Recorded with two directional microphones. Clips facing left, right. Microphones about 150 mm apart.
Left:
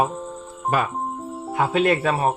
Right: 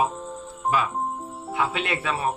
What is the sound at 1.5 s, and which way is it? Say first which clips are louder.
Speech: left 7 dB; 40° left (ahead or behind).